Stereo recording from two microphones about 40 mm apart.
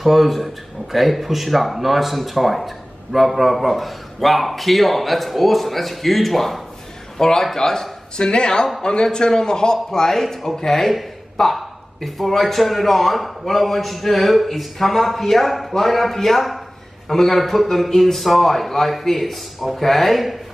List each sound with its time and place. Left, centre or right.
0.0 s a man's voice: centre